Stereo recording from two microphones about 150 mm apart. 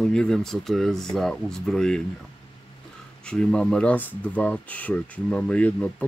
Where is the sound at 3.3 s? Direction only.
5° left (ahead or behind).